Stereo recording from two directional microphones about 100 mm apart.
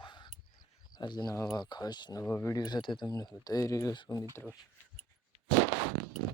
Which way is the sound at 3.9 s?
50° left (ahead or behind).